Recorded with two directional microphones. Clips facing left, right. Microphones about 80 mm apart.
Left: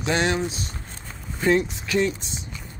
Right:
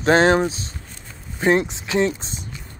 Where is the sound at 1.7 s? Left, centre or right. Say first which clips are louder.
Right 3 dB; right.